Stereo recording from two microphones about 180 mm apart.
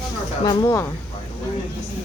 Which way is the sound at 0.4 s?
15° left (ahead or behind).